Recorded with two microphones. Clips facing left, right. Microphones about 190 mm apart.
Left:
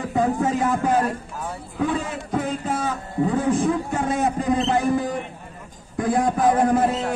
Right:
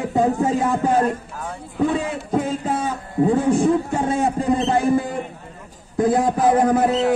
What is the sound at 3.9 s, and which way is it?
Speech, 30° right (ahead or behind).